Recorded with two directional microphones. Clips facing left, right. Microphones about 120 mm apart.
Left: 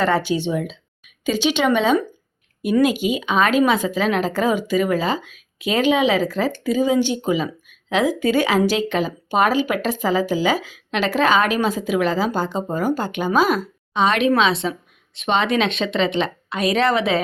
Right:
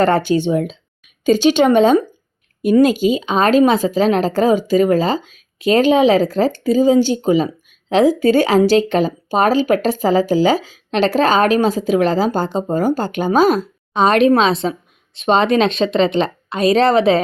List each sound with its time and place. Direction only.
0.0 s speech: 45° right (ahead or behind)